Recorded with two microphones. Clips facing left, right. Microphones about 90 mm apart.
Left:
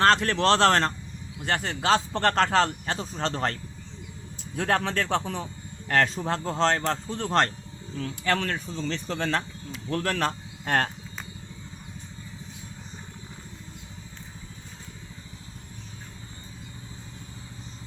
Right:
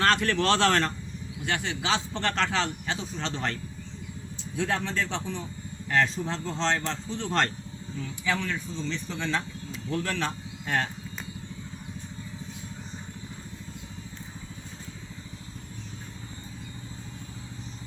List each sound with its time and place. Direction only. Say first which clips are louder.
0.0 s a man's voice: left 3 dB; 35° left (ahead or behind)
4.5 s a man's voice: left 3 dB; 55° left (ahead or behind); by 7.5 s 40° left (ahead or behind)
7.9 s speech: left 3 dB; 60° left (ahead or behind)